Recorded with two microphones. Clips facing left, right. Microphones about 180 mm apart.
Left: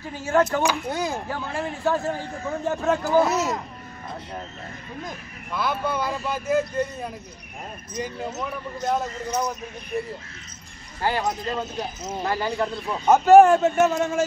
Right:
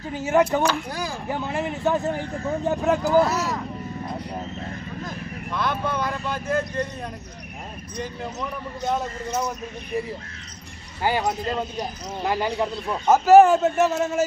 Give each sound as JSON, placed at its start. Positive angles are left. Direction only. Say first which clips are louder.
{"t": 0.1, "sound": "speech", "louder": "right 1 dB", "side_deg": -15}
{"t": 0.8, "sound": "speech", "louder": "left 4 dB", "side_deg": 20}
{"t": 1.3, "sound": "speech", "louder": "right 3 dB", "side_deg": -20}
{"t": 3.2, "sound": "speech", "louder": "even", "side_deg": 20}
{"t": 5.5, "sound": "speech", "louder": "even", "side_deg": 5}
{"t": 7.9, "sound": "speech", "louder": "left 2 dB", "side_deg": 5}
{"t": 11.2, "sound": "speech", "louder": "right 1 dB", "side_deg": 0}
{"t": 12.3, "sound": "speech", "louder": "right 2 dB", "side_deg": -15}
{"t": 13.0, "sound": "speech", "louder": "even", "side_deg": 0}